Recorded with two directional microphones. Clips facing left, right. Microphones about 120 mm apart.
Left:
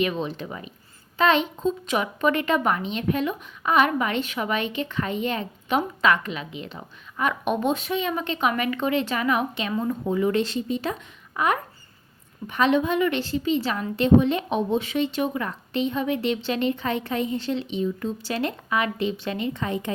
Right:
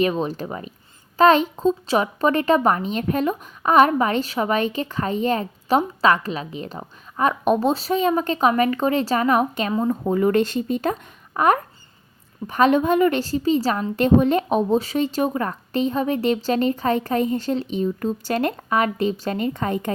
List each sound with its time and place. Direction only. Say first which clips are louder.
0.0 s a woman's voice: right 4 dB; 40° right (ahead or behind)